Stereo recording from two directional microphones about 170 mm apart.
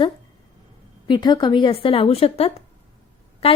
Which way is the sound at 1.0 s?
25° left (ahead or behind).